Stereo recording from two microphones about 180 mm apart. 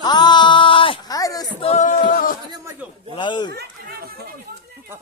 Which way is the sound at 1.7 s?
45° left (ahead or behind).